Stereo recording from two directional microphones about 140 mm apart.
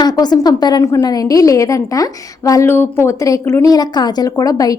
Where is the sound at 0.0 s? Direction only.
30° left (ahead or behind).